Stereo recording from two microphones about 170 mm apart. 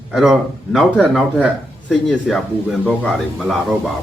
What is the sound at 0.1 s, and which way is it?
Speech, centre (ahead or behind).